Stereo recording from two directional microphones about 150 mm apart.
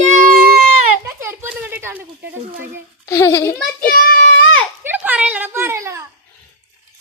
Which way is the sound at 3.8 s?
75° left (ahead or behind).